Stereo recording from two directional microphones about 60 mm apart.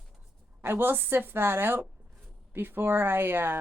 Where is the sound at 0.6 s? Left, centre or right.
Right.